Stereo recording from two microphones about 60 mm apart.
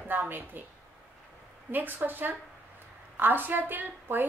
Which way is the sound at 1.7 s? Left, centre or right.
Right.